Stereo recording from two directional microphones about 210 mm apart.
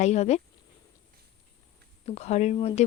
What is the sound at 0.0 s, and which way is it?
Speech, 30° left (ahead or behind).